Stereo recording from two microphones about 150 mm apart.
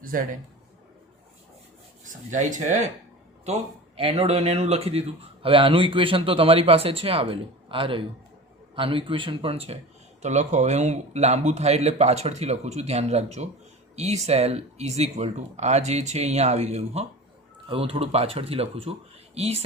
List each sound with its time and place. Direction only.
0.1 s a man's voice: 70° right (ahead or behind)
2.0 s speech: 55° right (ahead or behind)
3.4 s speech: 45° right (ahead or behind)